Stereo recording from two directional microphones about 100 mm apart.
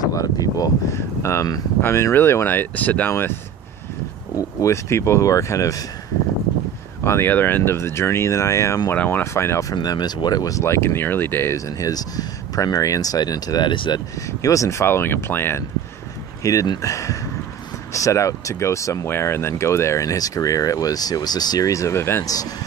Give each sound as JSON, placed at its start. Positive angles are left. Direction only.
{"t": 0.0, "sound": "speech", "side_deg": 35}
{"t": 4.4, "sound": "speech", "side_deg": 30}
{"t": 7.0, "sound": "speech", "side_deg": 25}
{"t": 8.9, "sound": "speech", "side_deg": 20}
{"t": 9.8, "sound": "speech", "side_deg": 45}
{"t": 11.5, "sound": "speech", "side_deg": 35}
{"t": 14.4, "sound": "speech", "side_deg": 35}
{"t": 16.6, "sound": "speech", "side_deg": 45}
{"t": 16.9, "sound": "speech", "side_deg": 30}